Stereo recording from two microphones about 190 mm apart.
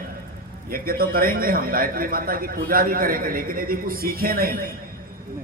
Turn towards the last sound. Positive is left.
turn(degrees=-50)  # may be behind; listen again after turning